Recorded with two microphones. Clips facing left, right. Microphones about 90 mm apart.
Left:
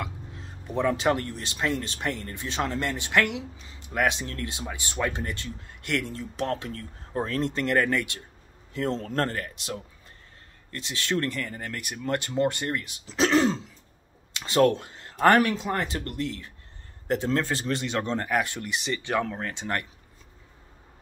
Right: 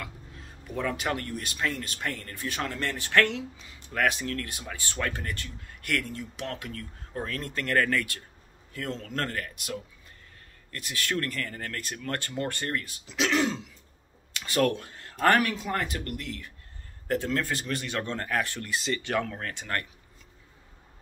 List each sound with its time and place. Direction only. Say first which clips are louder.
0.0 s speech: left 5 dB; 25° left (ahead or behind)
8.7 s speech: left 6 dB; 30° left (ahead or behind)
13.0 s speech: left 5 dB; 35° left (ahead or behind)